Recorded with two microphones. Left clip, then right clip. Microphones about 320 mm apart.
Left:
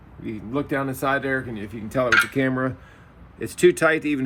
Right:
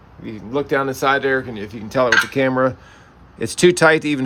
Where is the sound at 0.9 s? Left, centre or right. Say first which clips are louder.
Right 5 dB; centre.